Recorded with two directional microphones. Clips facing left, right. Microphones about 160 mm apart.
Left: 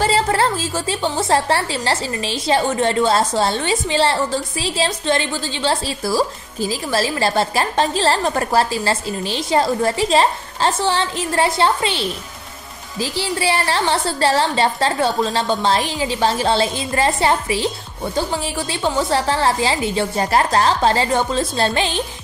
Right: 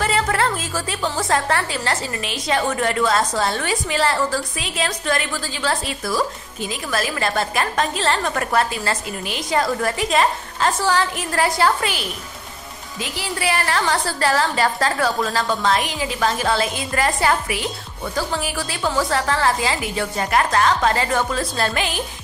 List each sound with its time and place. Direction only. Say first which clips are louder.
0.0 s a woman's voice: left 3 dB; 30° left (ahead or behind)